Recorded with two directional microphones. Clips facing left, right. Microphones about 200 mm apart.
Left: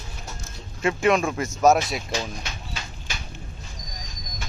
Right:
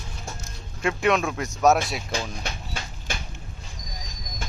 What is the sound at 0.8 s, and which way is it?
Speech, centre (ahead or behind).